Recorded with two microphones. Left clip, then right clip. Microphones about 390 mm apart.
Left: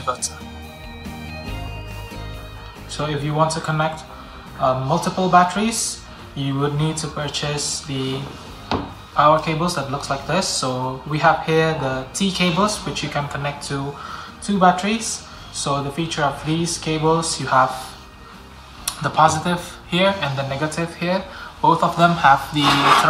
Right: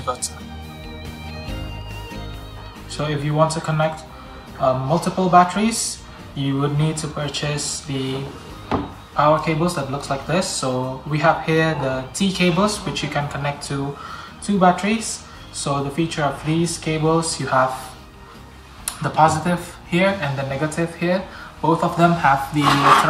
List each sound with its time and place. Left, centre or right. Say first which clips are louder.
2.9 s speech: even; centre
19.0 s speech: even; centre